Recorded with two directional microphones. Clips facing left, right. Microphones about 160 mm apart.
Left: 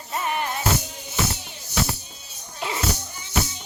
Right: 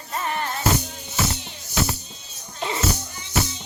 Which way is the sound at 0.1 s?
15° left (ahead or behind).